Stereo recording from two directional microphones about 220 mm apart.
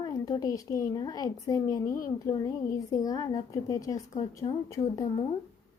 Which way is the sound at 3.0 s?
15° left (ahead or behind).